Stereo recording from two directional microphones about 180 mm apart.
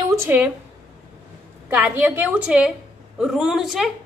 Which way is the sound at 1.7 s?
10° right (ahead or behind).